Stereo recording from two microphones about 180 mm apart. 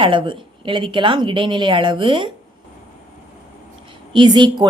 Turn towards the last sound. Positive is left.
turn(degrees=-25)  # may be behind; listen again after turning